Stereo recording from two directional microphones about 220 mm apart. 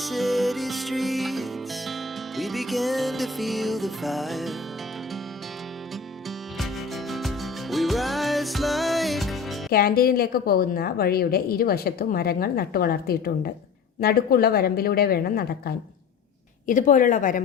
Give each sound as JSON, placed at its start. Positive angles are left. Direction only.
{"t": 0.0, "sound": "music", "side_deg": 0}
{"t": 6.6, "sound": "music", "side_deg": 0}
{"t": 9.7, "sound": "a woman's voice", "side_deg": 45}